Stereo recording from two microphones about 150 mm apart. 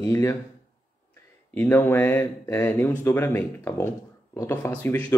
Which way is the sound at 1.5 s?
15° left (ahead or behind).